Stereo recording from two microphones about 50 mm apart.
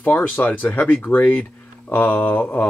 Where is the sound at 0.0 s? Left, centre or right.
Left.